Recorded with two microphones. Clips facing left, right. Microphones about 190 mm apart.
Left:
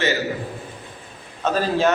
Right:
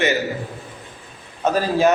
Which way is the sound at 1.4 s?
10° right (ahead or behind).